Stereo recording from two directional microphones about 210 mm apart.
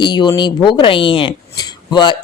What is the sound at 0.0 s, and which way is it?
Speech, 20° left (ahead or behind).